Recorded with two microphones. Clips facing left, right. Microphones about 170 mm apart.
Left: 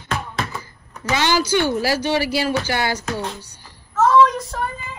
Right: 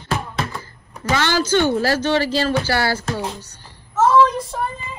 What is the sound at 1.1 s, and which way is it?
Speech, 50° right (ahead or behind).